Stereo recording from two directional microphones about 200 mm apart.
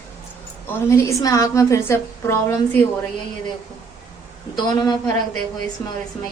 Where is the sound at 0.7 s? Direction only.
15° left (ahead or behind).